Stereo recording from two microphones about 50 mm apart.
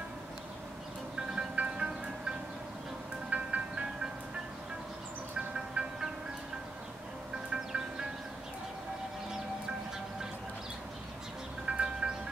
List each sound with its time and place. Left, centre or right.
1.3 s music: right
3.3 s ice cream truck: right
5.8 s music: right
7.5 s music: centre
11.6 s music: centre